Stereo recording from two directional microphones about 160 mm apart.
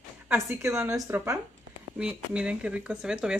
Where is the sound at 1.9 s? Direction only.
5° right (ahead or behind).